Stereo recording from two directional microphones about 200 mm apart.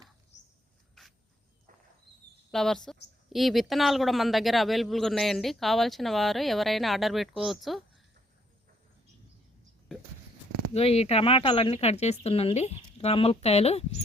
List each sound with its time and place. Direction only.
1.0 s a sound: centre (ahead or behind)
2.5 s a woman's voice: centre (ahead or behind)
10.8 s speech: 30° left (ahead or behind)